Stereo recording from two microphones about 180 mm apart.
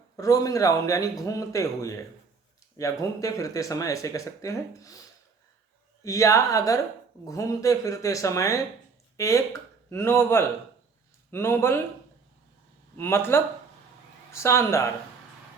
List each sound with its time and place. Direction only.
0.2 s speech: 20° left (ahead or behind)
6.0 s speech: 15° left (ahead or behind)
13.0 s speech: 15° left (ahead or behind)